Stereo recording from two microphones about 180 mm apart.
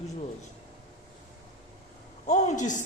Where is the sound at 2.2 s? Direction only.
40° left (ahead or behind).